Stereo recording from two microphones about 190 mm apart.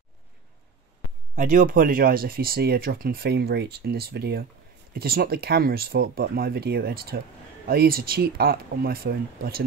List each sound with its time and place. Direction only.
1.3 s speech: 45° right (ahead or behind)